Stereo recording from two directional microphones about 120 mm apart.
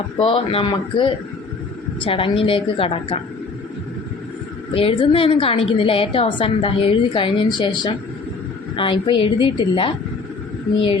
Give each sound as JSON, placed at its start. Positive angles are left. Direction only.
{"t": 0.2, "sound": "a woman's voice", "side_deg": 50}
{"t": 4.7, "sound": "a woman's voice", "side_deg": 50}